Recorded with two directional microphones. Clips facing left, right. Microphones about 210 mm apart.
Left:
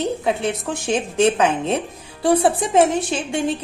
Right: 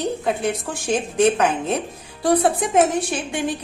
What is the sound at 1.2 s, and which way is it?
A woman's voice, 25° left (ahead or behind).